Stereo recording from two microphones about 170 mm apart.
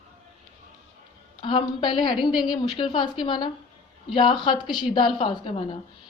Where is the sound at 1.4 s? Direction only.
30° left (ahead or behind).